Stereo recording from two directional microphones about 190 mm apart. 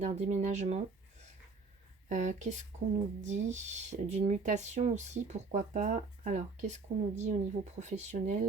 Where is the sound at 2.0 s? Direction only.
40° right (ahead or behind).